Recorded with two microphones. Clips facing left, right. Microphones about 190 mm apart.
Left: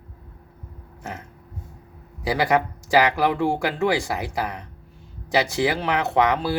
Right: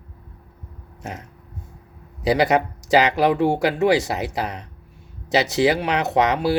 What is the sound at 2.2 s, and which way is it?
Speech, 20° right (ahead or behind).